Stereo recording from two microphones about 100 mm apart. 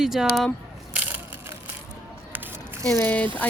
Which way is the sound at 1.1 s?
20° right (ahead or behind).